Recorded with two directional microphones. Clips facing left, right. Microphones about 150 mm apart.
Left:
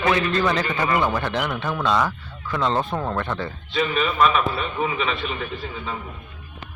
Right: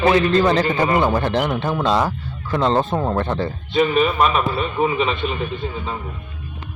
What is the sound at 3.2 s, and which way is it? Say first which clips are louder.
A man's voice: right 5 dB; 30° right (ahead or behind).